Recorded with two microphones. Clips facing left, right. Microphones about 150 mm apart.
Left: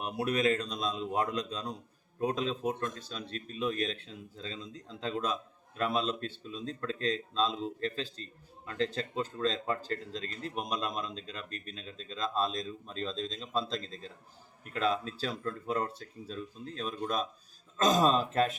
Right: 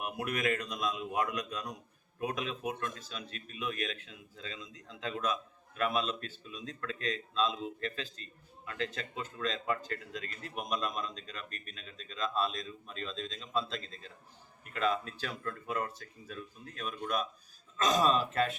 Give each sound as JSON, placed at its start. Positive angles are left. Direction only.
{"t": 0.0, "sound": "a man's voice", "side_deg": 30}